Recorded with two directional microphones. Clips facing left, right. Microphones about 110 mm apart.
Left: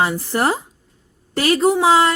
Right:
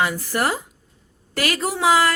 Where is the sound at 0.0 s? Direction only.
30° left (ahead or behind).